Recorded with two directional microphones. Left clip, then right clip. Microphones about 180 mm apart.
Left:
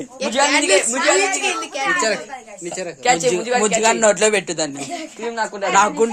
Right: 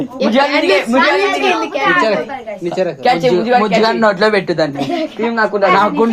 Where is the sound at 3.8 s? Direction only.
80° left.